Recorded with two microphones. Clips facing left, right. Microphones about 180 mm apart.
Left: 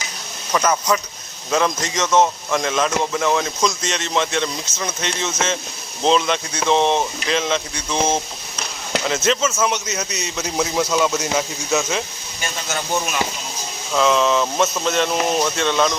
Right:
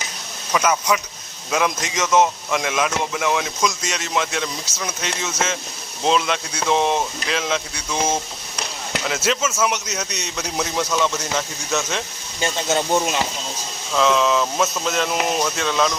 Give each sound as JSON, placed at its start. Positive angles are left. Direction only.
{"t": 0.5, "sound": "speech", "side_deg": 0}
{"t": 12.4, "sound": "speech", "side_deg": -25}
{"t": 13.9, "sound": "speech", "side_deg": 0}